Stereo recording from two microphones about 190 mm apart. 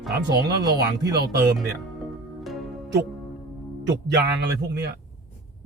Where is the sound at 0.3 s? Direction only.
60° right (ahead or behind).